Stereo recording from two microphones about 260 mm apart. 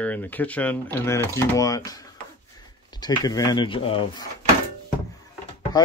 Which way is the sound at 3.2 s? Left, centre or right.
Centre.